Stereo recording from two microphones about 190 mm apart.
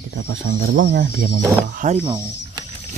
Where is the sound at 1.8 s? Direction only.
40° right (ahead or behind).